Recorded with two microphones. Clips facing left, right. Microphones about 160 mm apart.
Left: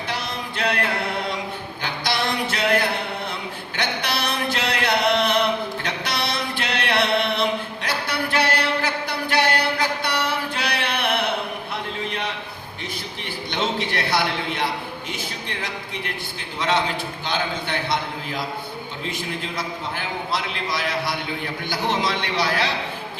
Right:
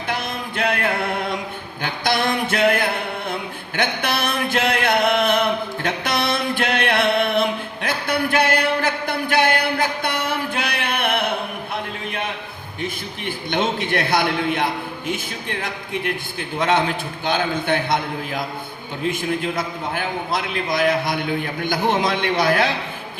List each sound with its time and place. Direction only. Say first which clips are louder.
0.1 s music: right 5 dB; 50° right (ahead or behind)
1.8 s a sound: right 4 dB; 50° right (ahead or behind)
12.8 s a man's voice: right 6 dB; 50° right (ahead or behind)